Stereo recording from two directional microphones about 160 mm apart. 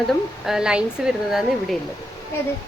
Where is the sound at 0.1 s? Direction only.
5° right (ahead or behind).